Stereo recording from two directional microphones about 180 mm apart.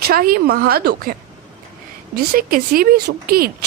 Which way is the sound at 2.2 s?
55° right (ahead or behind).